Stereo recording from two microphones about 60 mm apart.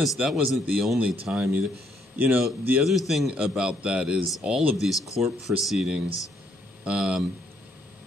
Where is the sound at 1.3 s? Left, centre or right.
Right.